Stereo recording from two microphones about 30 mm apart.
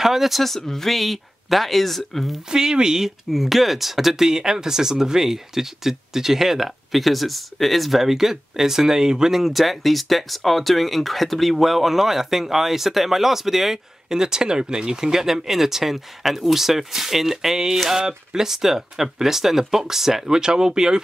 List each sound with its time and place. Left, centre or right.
0.0 s speech: centre
0.6 s speech: centre
0.8 s speech: centre
2.5 s speech: right
3.3 s speech: centre
8.0 s speech: centre
9.4 s speech: centre
14.1 s speech: right
15.0 s speech: centre
20.3 s speech: right